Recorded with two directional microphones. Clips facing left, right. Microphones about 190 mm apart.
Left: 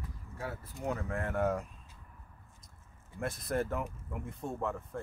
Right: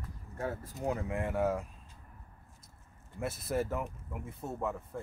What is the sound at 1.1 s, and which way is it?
Speech, 10° right (ahead or behind).